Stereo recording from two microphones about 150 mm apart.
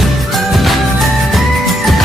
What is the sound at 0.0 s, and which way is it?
Music, centre (ahead or behind).